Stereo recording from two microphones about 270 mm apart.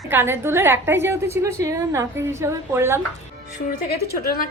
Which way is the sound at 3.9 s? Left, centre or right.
Left.